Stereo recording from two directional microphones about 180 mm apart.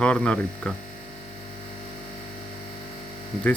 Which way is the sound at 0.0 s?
5° left (ahead or behind).